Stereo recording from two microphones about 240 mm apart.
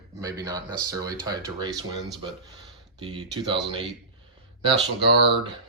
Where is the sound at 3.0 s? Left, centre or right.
Right.